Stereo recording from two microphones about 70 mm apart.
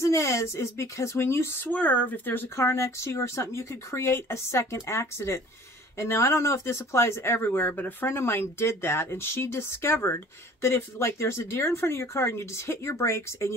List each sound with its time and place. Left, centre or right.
0.0 s speech: left